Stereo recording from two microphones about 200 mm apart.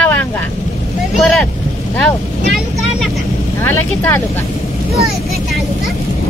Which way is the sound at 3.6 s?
10° left (ahead or behind).